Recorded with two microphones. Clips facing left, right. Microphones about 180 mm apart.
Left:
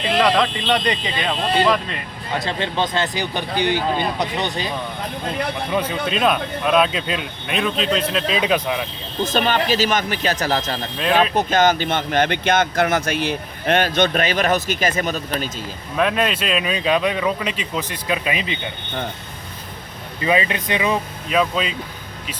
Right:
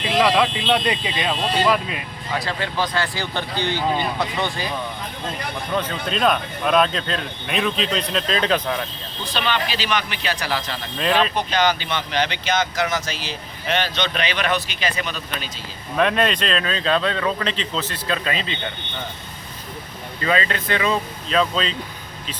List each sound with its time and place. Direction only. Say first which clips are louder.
0.2 s speech: right 1 dB; 5° right (ahead or behind)
2.4 s speech: left 3 dB; 25° left (ahead or behind)
5.7 s speech: left 1 dB; 10° left (ahead or behind)
9.2 s speech: left 5 dB; 45° left (ahead or behind)
16.0 s speech: even; 5° left (ahead or behind)
20.2 s speech: left 2 dB; 15° left (ahead or behind)